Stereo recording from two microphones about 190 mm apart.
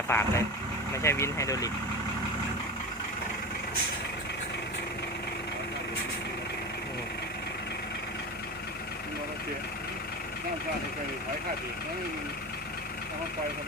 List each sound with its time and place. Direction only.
0.1 s speech: 10° left (ahead or behind)